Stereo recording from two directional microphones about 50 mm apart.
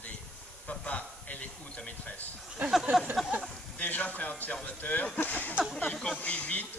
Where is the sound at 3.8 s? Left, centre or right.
Left.